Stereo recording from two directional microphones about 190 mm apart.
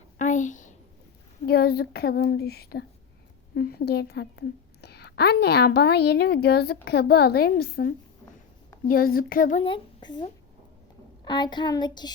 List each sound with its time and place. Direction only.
0.2 s a sound: 40° left (ahead or behind)
1.5 s a woman's voice: 55° left (ahead or behind)
9.6 s a woman's voice: 25° left (ahead or behind)
11.3 s a child's voice: 25° left (ahead or behind)